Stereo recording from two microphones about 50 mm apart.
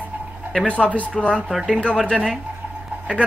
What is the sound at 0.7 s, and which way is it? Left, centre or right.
Speech, left.